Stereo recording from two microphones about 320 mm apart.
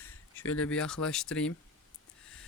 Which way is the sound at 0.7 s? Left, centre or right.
Centre.